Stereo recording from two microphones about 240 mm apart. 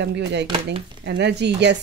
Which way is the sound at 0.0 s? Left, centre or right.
Right.